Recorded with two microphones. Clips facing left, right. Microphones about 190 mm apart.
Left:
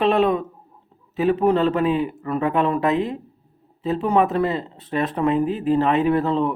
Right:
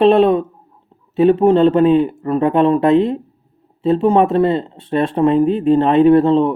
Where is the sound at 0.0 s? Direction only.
30° right (ahead or behind).